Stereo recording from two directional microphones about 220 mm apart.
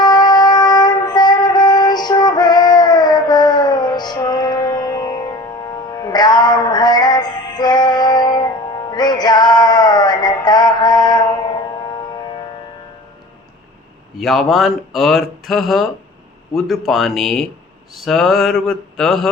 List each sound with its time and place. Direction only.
0.0 s music: 20° left (ahead or behind)
14.2 s speech: centre (ahead or behind)